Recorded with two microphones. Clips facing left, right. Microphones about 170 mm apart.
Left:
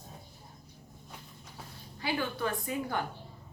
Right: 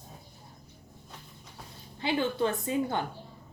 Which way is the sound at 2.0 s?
25° right (ahead or behind).